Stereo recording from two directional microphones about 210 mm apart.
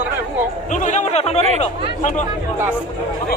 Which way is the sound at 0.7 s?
35° left (ahead or behind).